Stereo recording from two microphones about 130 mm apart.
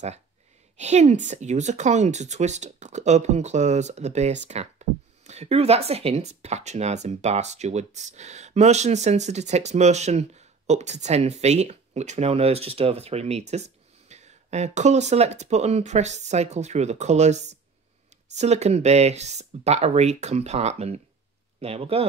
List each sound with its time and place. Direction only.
0.7 s speech: 60° right (ahead or behind)